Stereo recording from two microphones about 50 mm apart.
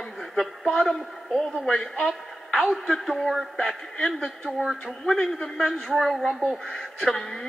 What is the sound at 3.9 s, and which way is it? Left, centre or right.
A man's voice, centre.